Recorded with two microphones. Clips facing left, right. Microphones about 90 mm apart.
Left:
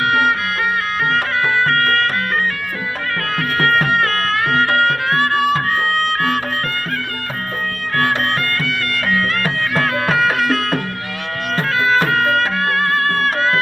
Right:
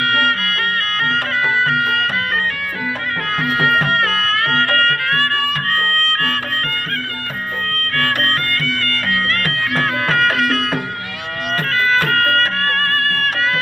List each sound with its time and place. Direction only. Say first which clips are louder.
0.0 s music: left 2 dB; 15° left (ahead or behind)
1.6 s music: left 1 dB; 5° right (ahead or behind)
3.6 s music: left 2 dB; centre (ahead or behind); by 6.4 s 20° left (ahead or behind)
7.9 s music: left 2 dB; 20° left (ahead or behind); by 10.8 s centre (ahead or behind)
12.0 s music: even; 10° left (ahead or behind); by 13.6 s 30° left (ahead or behind)